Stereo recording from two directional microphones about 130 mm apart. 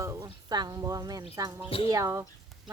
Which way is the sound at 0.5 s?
30° right (ahead or behind).